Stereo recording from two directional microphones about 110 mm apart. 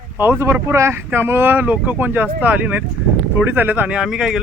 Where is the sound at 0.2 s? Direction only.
20° right (ahead or behind).